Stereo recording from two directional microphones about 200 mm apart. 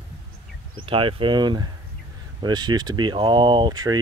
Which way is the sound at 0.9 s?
25° right (ahead or behind).